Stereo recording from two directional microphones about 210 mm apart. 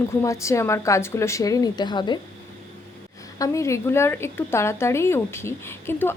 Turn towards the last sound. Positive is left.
turn(degrees=10)  # may be behind; listen again after turning